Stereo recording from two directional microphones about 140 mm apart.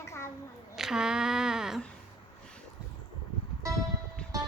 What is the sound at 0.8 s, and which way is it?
A woman's voice, 5° right (ahead or behind).